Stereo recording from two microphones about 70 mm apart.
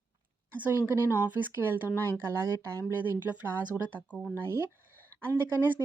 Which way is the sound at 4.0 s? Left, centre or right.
Centre.